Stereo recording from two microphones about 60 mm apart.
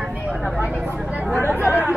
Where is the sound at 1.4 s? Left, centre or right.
Right.